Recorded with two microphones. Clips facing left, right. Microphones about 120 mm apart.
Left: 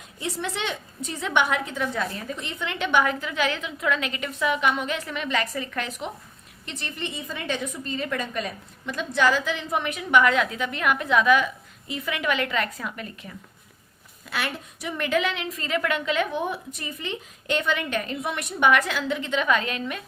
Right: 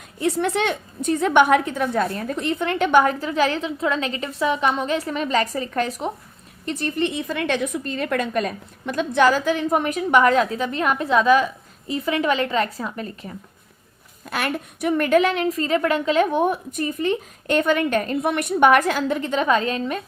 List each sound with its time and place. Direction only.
0.2 s a woman's voice: 55° right (ahead or behind); by 13.3 s 35° right (ahead or behind)
14.3 s a woman's voice: 50° right (ahead or behind); by 20.0 s 35° right (ahead or behind)